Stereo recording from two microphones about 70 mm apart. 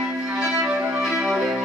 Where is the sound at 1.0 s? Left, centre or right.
Centre.